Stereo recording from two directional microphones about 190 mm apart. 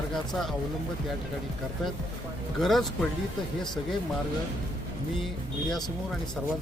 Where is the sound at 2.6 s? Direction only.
Centre (ahead or behind).